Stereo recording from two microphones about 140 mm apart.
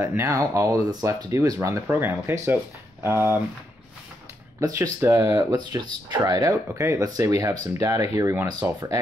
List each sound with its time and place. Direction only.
0.0 s speech: 20° right (ahead or behind)
4.6 s speech: 20° right (ahead or behind)